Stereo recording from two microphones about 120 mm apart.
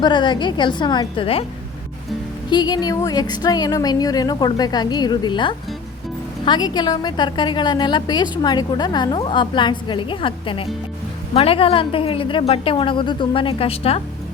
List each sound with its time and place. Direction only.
0.0 s speech: 40° left (ahead or behind)
2.5 s a woman's voice: 35° left (ahead or behind); by 14.0 s 55° left (ahead or behind)